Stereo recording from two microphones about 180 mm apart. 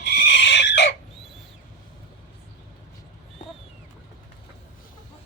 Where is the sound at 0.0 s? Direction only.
65° left (ahead or behind).